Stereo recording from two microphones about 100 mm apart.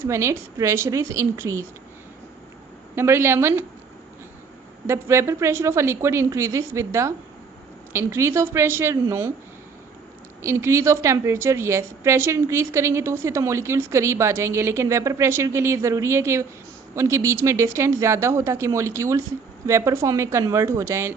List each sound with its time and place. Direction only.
0.0 s a woman's voice: 25° right (ahead or behind)
2.9 s a woman's voice: 25° right (ahead or behind)
4.9 s a woman's voice: 25° right (ahead or behind)
10.4 s a woman's voice: 25° right (ahead or behind)